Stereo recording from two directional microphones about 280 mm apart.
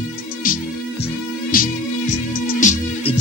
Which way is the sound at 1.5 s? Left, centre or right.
Left.